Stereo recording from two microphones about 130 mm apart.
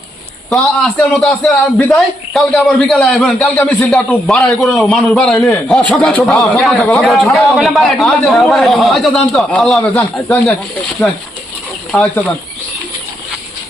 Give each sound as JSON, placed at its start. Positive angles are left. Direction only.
{"t": 0.5, "sound": "a man's voice", "side_deg": 5}
{"t": 3.5, "sound": "a man's voice", "side_deg": 10}